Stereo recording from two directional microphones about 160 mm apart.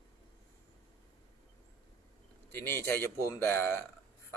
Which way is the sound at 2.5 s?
15° left (ahead or behind).